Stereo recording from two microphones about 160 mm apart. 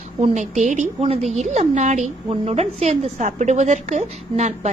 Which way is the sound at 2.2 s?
40° right (ahead or behind).